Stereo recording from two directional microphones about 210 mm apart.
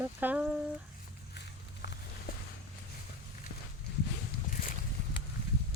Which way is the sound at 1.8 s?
50° left (ahead or behind).